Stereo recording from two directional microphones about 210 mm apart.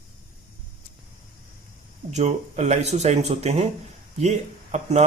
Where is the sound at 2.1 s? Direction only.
30° right (ahead or behind).